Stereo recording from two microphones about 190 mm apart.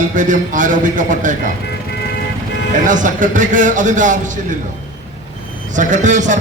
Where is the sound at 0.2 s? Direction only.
40° right (ahead or behind).